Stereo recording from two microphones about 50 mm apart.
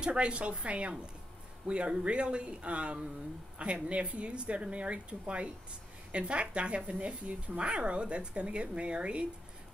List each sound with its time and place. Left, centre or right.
0.0 s speech: right